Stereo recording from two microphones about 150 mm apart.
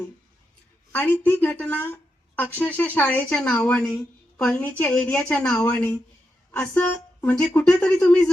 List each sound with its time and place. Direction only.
0.9 s speech: 10° left (ahead or behind)